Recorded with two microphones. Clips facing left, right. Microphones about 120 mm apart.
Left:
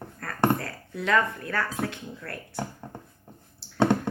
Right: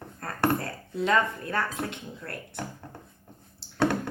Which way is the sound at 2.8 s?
15° left (ahead or behind).